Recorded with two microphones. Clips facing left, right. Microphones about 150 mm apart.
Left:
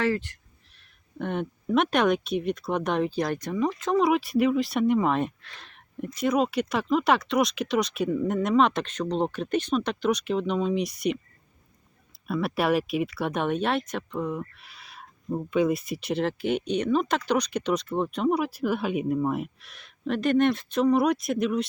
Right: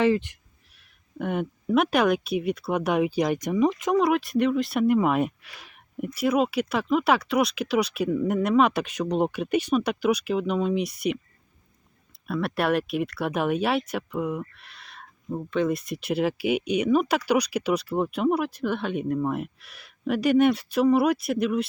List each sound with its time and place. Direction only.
0.0 s speech: 20° right (ahead or behind)
0.8 s speech: 5° right (ahead or behind)
3.9 s speech: centre (ahead or behind)
12.2 s speech: centre (ahead or behind)